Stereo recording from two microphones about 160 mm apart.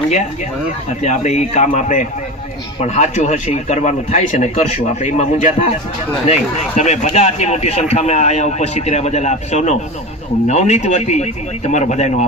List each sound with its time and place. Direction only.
1.0 s a man's voice: 45° left (ahead or behind)